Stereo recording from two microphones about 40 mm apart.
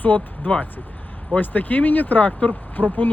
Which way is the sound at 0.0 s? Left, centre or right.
Left.